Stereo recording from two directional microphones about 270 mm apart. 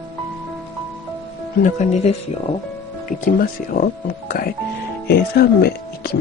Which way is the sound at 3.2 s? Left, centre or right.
Left.